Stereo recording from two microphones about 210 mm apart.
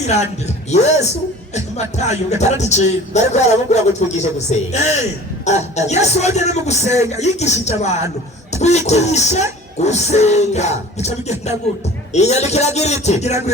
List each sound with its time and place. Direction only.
0.0 s speech: 35° left (ahead or behind)